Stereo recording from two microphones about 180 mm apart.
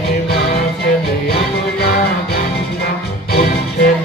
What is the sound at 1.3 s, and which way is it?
Music, 60° left (ahead or behind).